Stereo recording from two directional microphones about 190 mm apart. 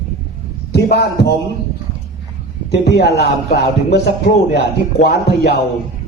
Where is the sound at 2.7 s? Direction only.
60° left (ahead or behind).